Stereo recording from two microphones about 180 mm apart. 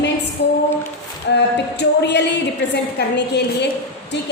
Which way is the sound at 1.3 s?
70° left (ahead or behind).